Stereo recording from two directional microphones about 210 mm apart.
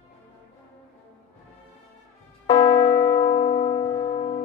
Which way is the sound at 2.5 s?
20° left (ahead or behind).